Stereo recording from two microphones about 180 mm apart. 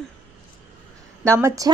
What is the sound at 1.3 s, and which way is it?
Speech, 20° right (ahead or behind).